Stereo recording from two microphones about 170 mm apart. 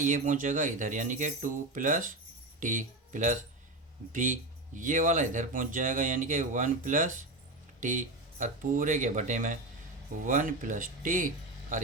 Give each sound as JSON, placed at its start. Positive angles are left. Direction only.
{"t": 0.0, "sound": "speech", "side_deg": -50}